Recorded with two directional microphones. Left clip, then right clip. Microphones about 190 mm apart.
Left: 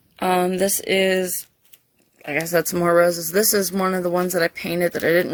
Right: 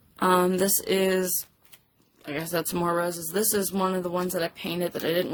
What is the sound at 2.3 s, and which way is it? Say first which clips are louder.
Speech: left 8 dB; 30° left (ahead or behind).